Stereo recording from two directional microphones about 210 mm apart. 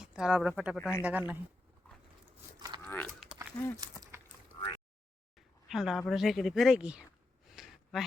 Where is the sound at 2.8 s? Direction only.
10° left (ahead or behind).